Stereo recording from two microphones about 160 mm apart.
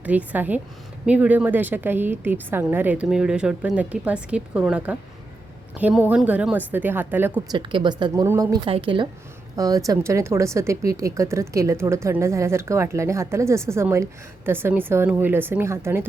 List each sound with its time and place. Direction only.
0.0 s speech: 10° right (ahead or behind)
7.5 s speech: 30° right (ahead or behind)
8.6 s a woman's voice: 35° right (ahead or behind)
9.6 s speech: 20° right (ahead or behind)